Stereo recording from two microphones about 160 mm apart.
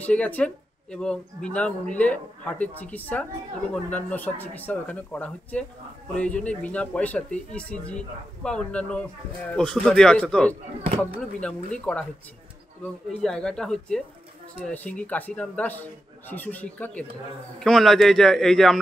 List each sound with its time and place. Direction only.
0.0 s a woman's voice: 10° left (ahead or behind)